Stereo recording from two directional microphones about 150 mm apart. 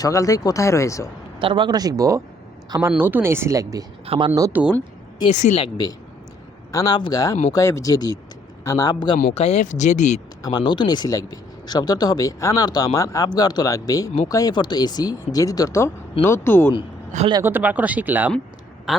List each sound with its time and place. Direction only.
0.0 s speech: 20° left (ahead or behind)
1.4 s speech: 35° right (ahead or behind)
4.0 s speech: 40° right (ahead or behind)
4.5 s speech: 10° right (ahead or behind)
5.3 s speech: 50° left (ahead or behind)
5.5 s speech: 30° left (ahead or behind)
9.3 s speech: 45° left (ahead or behind)
10.4 s speech: 30° left (ahead or behind)
17.4 s speech: 10° right (ahead or behind)